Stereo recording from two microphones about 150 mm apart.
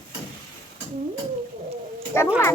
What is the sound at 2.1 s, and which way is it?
Speech, 15° left (ahead or behind).